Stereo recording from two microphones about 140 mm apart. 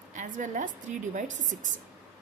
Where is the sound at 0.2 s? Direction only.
65° right (ahead or behind).